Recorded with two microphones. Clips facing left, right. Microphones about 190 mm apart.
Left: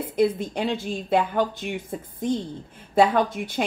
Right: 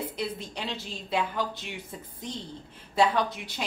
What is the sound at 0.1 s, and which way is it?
A woman's voice, 50° left (ahead or behind).